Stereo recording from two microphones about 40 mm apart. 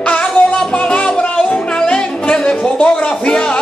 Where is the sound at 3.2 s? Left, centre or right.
Left.